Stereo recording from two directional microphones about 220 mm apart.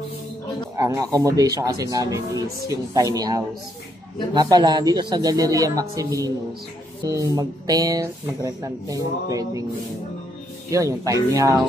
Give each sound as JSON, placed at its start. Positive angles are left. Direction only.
{"t": 0.7, "sound": "speech", "side_deg": -15}
{"t": 10.7, "sound": "speech", "side_deg": -15}